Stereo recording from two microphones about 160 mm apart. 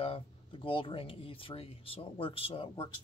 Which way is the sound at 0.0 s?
35° left (ahead or behind).